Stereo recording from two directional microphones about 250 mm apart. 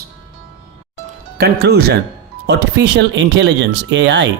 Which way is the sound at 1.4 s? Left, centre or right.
Right.